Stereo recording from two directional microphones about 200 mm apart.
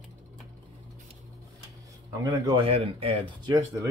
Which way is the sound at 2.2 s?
20° right (ahead or behind).